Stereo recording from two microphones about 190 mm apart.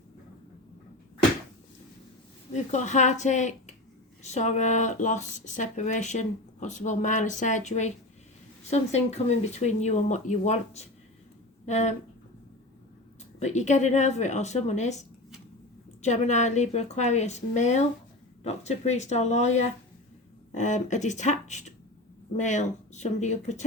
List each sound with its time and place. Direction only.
2.5 s speech: 40° left (ahead or behind)
13.4 s speech: 40° left (ahead or behind)
16.0 s speech: 35° left (ahead or behind)